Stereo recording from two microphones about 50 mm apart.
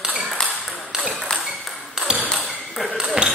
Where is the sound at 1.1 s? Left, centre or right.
Centre.